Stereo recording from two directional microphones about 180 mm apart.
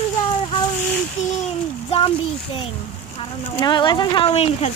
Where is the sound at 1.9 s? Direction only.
30° left (ahead or behind).